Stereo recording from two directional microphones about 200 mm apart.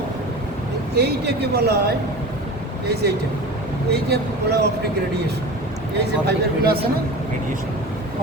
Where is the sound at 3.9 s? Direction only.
55° right (ahead or behind).